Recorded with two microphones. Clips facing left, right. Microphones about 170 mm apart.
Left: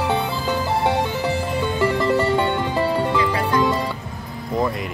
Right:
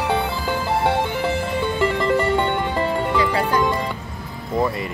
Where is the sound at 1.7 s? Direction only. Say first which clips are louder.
Left 1 dB; 20° right (ahead or behind).